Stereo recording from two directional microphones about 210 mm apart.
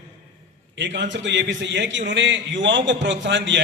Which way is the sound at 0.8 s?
60° right (ahead or behind).